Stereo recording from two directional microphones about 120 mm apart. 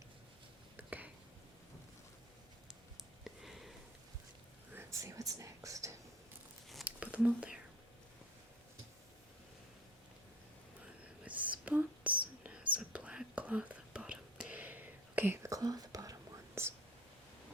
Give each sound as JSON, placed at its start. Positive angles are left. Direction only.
{"t": 0.8, "sound": "a sound", "side_deg": -15}
{"t": 3.0, "sound": "a sound", "side_deg": 0}
{"t": 4.7, "sound": "whispering", "side_deg": -20}
{"t": 6.8, "sound": "whispering", "side_deg": -10}
{"t": 11.3, "sound": "whispering", "side_deg": -10}
{"t": 15.5, "sound": "whispering", "side_deg": -30}